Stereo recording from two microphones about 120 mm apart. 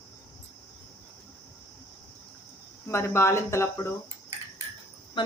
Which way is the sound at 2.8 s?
20° left (ahead or behind).